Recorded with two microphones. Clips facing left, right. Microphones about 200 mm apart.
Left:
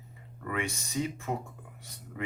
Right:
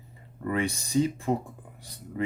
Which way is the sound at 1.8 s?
35° right (ahead or behind).